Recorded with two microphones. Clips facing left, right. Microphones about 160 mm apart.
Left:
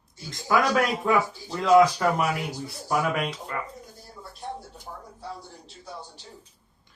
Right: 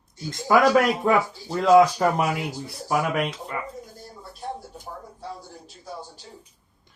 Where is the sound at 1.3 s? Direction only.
25° right (ahead or behind).